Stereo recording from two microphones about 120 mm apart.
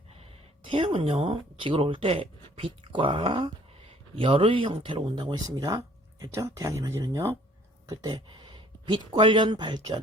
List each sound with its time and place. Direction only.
0.1 s speech: 50° right (ahead or behind)